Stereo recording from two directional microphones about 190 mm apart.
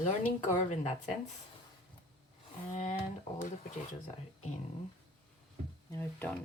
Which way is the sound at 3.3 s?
40° left (ahead or behind).